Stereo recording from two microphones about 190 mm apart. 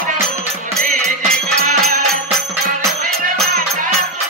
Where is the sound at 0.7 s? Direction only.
45° right (ahead or behind).